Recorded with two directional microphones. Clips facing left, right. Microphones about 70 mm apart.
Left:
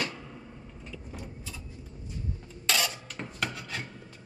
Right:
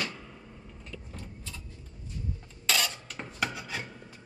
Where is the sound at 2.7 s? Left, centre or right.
Centre.